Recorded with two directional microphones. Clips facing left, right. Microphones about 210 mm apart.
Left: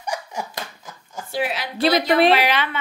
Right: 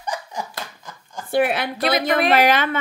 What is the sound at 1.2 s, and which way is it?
A woman's voice, 55° right (ahead or behind).